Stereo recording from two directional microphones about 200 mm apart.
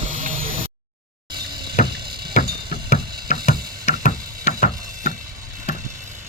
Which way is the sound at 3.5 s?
35° left (ahead or behind).